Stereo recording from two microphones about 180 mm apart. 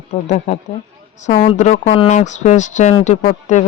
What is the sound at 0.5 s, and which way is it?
Speech, 40° left (ahead or behind).